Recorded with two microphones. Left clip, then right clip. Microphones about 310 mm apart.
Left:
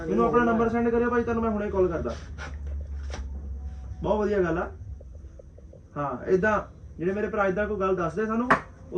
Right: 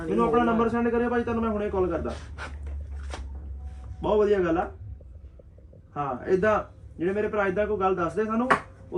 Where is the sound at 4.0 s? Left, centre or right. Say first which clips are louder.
Right 3 dB; centre.